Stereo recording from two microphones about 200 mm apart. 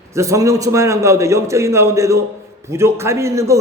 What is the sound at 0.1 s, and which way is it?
A man's voice, 15° right (ahead or behind).